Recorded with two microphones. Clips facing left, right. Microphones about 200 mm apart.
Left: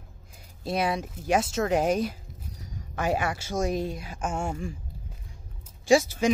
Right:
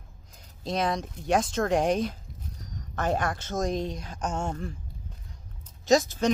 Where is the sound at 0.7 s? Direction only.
10° left (ahead or behind).